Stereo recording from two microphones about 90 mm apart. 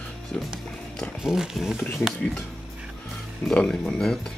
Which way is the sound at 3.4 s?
5° left (ahead or behind).